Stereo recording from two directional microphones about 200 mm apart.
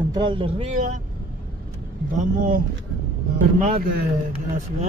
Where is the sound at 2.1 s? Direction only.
40° right (ahead or behind).